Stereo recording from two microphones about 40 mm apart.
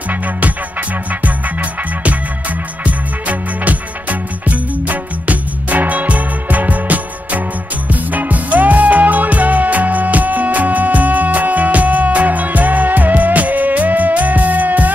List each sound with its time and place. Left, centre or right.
0.1 s music: right